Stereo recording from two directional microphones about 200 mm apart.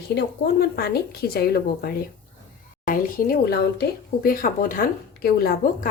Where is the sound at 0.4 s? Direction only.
60° left (ahead or behind).